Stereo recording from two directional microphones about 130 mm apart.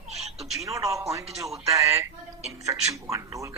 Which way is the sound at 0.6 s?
25° right (ahead or behind).